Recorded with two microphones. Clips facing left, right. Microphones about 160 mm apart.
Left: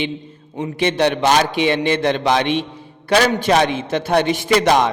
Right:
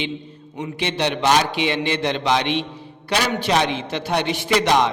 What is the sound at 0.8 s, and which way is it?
A man's voice, 50° left (ahead or behind).